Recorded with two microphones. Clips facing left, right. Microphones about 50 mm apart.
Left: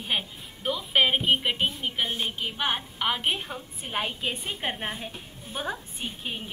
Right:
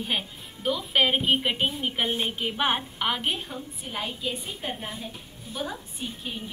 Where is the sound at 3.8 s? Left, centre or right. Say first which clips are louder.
Left 3 dB; left.